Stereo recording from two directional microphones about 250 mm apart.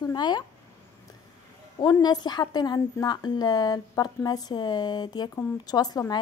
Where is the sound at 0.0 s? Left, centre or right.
Centre.